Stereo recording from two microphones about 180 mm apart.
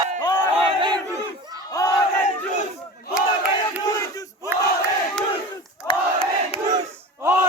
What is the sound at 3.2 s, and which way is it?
Battle cry, 5° right (ahead or behind).